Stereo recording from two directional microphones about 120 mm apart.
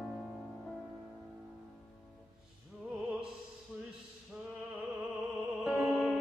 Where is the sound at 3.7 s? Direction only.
5° right (ahead or behind).